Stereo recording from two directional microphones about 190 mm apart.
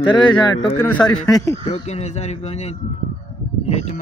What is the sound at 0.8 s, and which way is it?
Speech, 5° left (ahead or behind).